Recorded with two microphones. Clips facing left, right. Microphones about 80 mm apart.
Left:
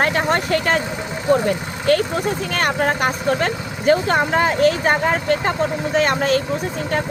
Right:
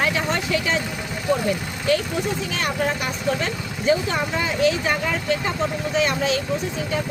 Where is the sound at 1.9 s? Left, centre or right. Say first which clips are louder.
Left 4 dB; left.